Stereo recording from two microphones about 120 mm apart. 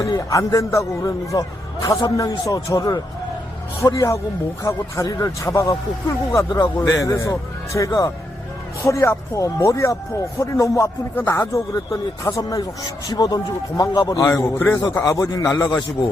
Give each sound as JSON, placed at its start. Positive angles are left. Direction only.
{"t": 0.0, "sound": "speech", "side_deg": 30}